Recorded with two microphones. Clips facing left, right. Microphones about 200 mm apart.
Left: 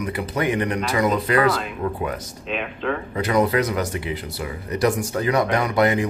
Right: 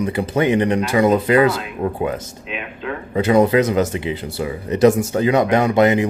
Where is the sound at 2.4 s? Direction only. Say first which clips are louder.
Left 6 dB; 5° right (ahead or behind).